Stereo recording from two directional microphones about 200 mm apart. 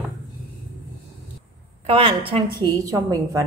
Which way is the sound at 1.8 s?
25° right (ahead or behind).